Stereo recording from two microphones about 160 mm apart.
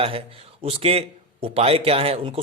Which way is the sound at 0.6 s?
40° right (ahead or behind).